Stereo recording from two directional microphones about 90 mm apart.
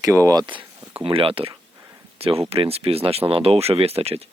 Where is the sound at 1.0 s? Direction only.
90° right.